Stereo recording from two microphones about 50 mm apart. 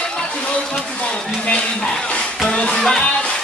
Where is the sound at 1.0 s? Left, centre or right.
Left.